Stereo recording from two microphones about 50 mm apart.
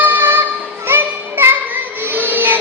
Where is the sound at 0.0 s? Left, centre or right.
Right.